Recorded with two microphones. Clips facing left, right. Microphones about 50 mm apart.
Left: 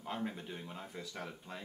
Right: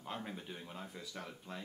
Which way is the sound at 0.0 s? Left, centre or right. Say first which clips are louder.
Left 4 dB; centre.